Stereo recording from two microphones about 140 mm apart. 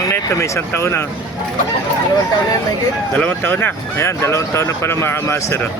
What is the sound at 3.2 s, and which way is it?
Speech, 15° left (ahead or behind).